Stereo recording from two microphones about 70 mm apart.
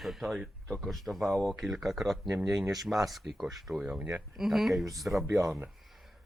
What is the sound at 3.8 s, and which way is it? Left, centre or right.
Speech, centre.